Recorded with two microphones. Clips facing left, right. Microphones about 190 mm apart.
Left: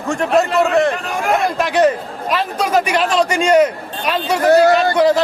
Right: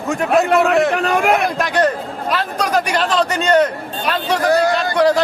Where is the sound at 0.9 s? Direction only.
70° right (ahead or behind).